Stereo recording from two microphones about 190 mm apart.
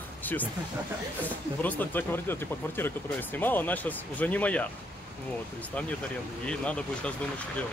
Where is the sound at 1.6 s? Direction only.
10° left (ahead or behind).